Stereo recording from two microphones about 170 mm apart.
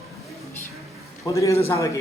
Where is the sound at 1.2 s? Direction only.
20° left (ahead or behind).